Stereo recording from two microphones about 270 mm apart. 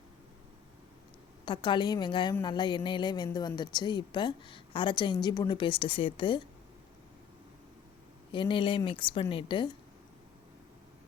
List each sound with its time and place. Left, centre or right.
1.5 s a woman's voice: centre
8.3 s a woman's voice: centre